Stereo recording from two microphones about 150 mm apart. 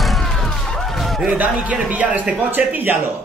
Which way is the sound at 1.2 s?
10° right (ahead or behind).